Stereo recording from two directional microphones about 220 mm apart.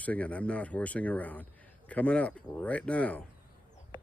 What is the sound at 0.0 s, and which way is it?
Speech, 5° left (ahead or behind).